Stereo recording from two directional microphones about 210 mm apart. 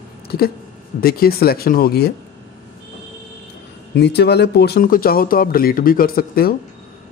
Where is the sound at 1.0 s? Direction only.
45° left (ahead or behind).